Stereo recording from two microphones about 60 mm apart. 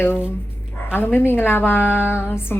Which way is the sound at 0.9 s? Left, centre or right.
Left.